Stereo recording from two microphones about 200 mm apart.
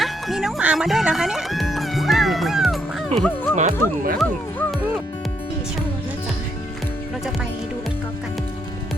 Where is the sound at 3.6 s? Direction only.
40° right (ahead or behind).